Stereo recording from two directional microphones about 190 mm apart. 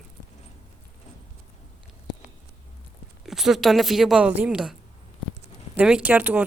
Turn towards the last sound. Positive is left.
turn(degrees=-10)  # may be behind; listen again after turning